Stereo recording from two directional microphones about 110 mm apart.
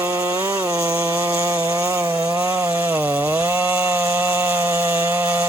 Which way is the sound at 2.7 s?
15° right (ahead or behind).